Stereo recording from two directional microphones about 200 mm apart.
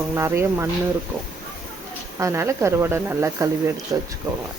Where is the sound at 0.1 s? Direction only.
15° right (ahead or behind).